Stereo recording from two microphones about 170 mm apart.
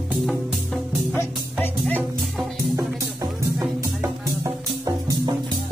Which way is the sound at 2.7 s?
20° right (ahead or behind).